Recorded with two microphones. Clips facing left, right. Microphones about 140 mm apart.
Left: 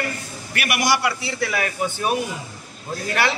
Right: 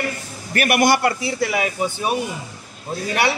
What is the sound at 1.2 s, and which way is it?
A man's voice, 15° right (ahead or behind).